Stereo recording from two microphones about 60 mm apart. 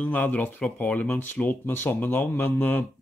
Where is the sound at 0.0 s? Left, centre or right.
Left.